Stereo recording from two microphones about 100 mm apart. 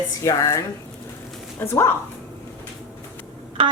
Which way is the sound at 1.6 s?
25° left (ahead or behind).